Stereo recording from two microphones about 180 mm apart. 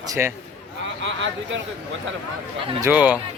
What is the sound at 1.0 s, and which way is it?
Speech, 90° right.